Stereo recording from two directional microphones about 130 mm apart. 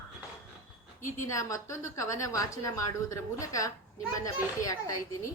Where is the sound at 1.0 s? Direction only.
25° left (ahead or behind).